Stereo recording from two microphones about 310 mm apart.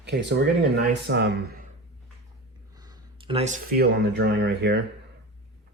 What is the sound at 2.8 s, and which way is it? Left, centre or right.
Speech, centre.